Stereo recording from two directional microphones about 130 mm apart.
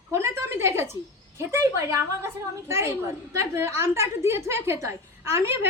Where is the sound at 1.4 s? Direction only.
20° right (ahead or behind).